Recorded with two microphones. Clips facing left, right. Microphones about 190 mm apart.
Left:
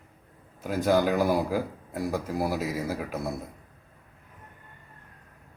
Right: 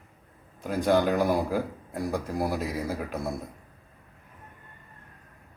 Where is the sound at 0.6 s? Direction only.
Centre (ahead or behind).